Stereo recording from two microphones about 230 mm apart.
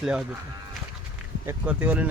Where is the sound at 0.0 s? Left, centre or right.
Centre.